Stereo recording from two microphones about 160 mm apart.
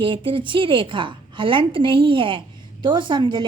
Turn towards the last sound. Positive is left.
turn(degrees=-30)  # may be behind; listen again after turning